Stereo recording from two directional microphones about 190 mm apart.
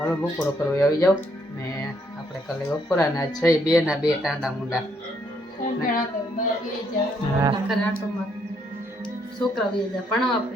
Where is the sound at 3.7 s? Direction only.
5° right (ahead or behind).